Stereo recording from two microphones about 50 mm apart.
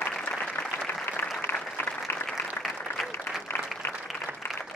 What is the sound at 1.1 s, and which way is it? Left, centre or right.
Applause, left.